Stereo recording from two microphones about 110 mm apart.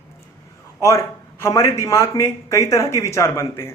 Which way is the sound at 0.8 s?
25° left (ahead or behind).